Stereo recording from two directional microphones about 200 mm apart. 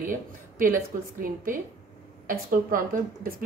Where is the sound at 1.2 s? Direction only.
45° right (ahead or behind).